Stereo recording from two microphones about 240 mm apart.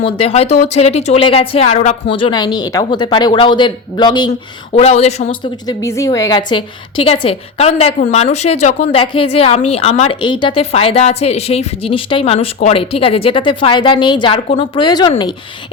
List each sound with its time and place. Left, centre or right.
0.0 s a woman's voice: left